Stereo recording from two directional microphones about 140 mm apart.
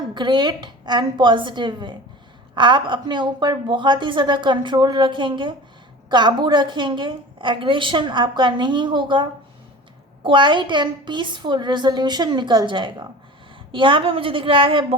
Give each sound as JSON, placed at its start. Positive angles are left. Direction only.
{"t": 0.1, "sound": "a woman's voice", "side_deg": -30}
{"t": 10.2, "sound": "a woman's voice", "side_deg": -35}